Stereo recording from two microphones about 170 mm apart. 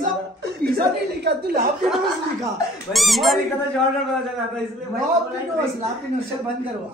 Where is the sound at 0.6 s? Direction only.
70° right (ahead or behind).